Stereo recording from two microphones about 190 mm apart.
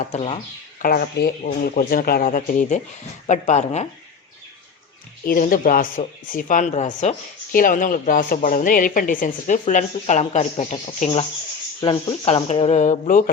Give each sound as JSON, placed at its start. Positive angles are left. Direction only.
{"t": 0.0, "sound": "speech", "side_deg": 35}
{"t": 0.8, "sound": "speech", "side_deg": 50}
{"t": 5.2, "sound": "speech", "side_deg": 50}